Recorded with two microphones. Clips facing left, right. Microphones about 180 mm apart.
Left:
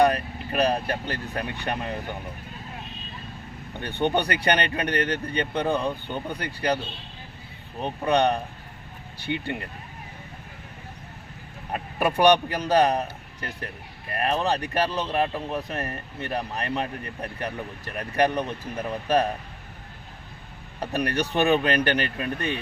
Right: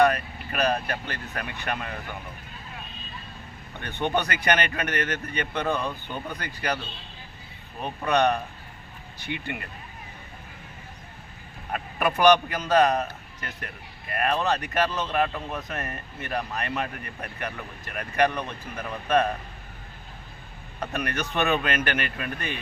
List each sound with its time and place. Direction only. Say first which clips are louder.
0.0 s speech: left 1 dB; 30° left (ahead or behind)
3.9 s speech: left 2 dB; 30° left (ahead or behind)
7.8 s speech: left 1 dB; 30° left (ahead or behind)
11.7 s speech: left 1 dB; 30° left (ahead or behind)
14.2 s speech: even; 30° left (ahead or behind)
20.9 s speech: left 4 dB; 35° left (ahead or behind)